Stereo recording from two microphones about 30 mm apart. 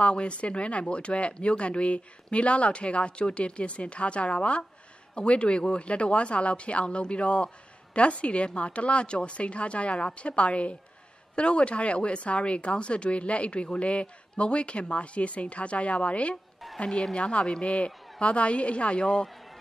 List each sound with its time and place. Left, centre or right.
0.0 s speech: left
16.6 s a sound: centre
17.1 s speech: left
18.9 s a man's voice: centre